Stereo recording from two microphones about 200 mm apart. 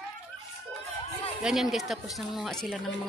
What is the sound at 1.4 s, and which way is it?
Speech, centre (ahead or behind).